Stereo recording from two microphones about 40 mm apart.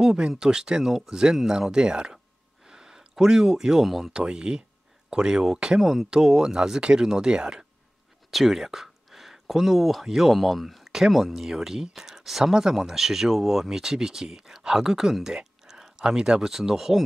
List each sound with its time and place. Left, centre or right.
0.0 s speech: centre
2.6 s a sound: centre
3.8 s speech: centre
4.1 s speech: right
5.8 s speech: centre
8.3 s speech: centre